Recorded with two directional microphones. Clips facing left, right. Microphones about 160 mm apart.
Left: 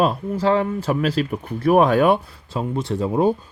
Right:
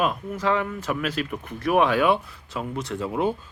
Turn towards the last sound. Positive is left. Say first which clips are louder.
# left 6 dB
turn(degrees=35)  # may be behind; listen again after turning